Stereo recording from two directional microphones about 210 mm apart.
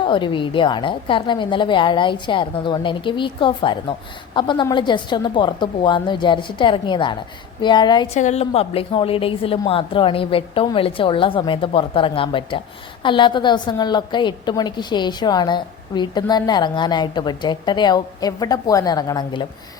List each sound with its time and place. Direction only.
0.0 s a woman's voice: 25° left (ahead or behind)
8.2 s a woman's voice: 30° left (ahead or behind)